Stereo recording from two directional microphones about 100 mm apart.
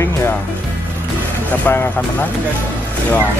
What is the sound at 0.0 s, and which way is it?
Music, 25° left (ahead or behind).